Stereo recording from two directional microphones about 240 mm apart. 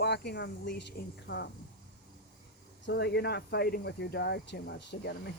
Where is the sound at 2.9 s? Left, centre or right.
Left.